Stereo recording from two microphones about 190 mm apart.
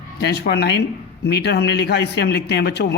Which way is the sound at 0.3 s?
60° left (ahead or behind).